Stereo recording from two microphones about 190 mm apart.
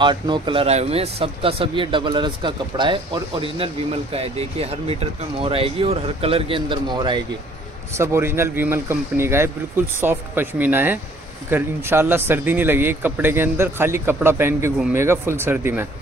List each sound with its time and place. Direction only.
0.0 s speech: 25° right (ahead or behind)